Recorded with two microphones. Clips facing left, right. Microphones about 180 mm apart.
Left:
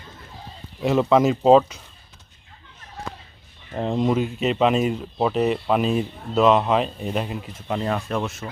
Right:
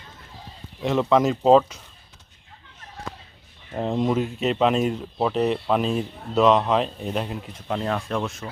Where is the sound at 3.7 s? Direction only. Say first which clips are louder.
Left 1 dB; centre (ahead or behind).